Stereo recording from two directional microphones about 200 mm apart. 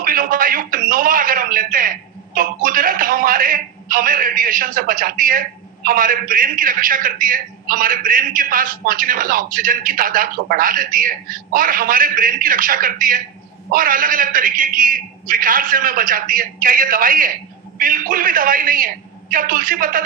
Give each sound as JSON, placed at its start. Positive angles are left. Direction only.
{"t": 0.0, "sound": "a man's voice", "side_deg": -45}